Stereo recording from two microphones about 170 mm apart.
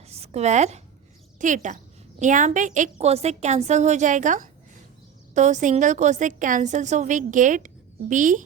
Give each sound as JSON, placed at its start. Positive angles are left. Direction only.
{"t": 0.1, "sound": "a woman's voice", "side_deg": -40}